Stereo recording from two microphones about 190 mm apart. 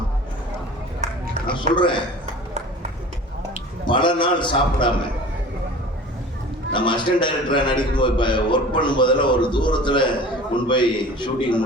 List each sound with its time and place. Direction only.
1.0 s run: 35° right (ahead or behind)
1.5 s a man's voice: 25° left (ahead or behind)
3.8 s a man's voice: 25° left (ahead or behind)
6.7 s a man's voice: 25° left (ahead or behind)